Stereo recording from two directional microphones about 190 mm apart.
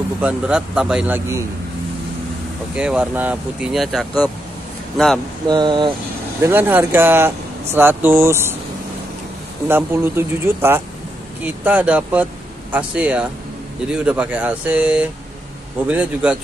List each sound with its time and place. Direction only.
0.2 s speech: 5° right (ahead or behind)
2.7 s speech: 5° right (ahead or behind)
5.5 s speech: 25° right (ahead or behind)
6.4 s speech: 10° right (ahead or behind)
9.7 s speech: 10° right (ahead or behind)